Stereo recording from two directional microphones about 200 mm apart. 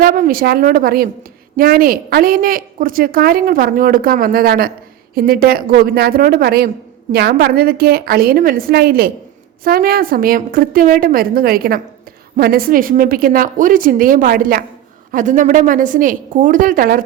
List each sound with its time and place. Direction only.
0.0 s a woman's voice: 45° right (ahead or behind)